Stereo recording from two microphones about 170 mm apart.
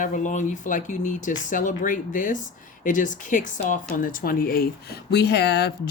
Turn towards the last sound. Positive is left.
turn(degrees=80)